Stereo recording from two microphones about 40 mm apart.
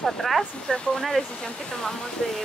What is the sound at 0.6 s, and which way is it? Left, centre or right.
Speech, left.